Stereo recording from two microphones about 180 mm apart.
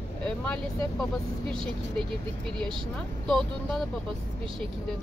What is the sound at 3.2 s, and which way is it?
Speech, centre (ahead or behind).